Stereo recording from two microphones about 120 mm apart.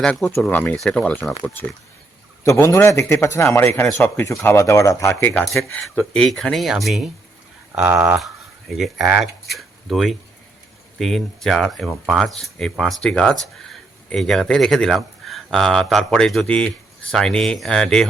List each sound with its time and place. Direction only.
0.0 s speech: 5° left (ahead or behind)
2.4 s a man's voice: 25° left (ahead or behind)
5.3 s speech: 5° left (ahead or behind)